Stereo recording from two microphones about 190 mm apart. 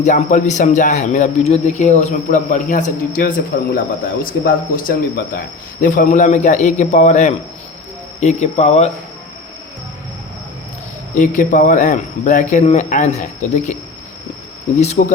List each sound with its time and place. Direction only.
0.0 s speech: 40° left (ahead or behind)
3.5 s a man's voice: 55° left (ahead or behind); by 8.9 s 35° left (ahead or behind)
11.2 s speech: 40° left (ahead or behind)
15.0 s speech: 45° left (ahead or behind)